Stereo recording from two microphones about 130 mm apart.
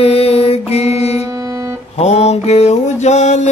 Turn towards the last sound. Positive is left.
turn(degrees=65)  # may be behind; listen again after turning